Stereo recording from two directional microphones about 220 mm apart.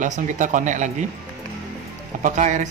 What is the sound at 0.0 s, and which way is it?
Speech, 35° right (ahead or behind).